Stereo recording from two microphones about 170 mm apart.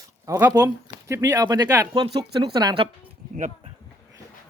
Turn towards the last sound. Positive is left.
turn(degrees=-45)  # may be behind; listen again after turning